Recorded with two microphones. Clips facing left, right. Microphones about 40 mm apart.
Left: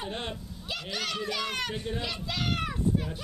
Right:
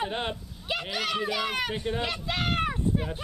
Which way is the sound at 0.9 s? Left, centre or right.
Centre.